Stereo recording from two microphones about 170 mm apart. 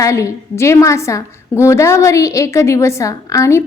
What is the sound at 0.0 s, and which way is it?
A woman's voice, 20° left (ahead or behind).